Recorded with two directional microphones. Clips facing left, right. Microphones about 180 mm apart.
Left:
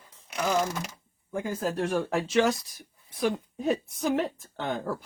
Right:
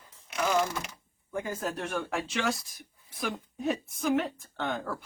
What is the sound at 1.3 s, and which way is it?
Speech, 30° left (ahead or behind).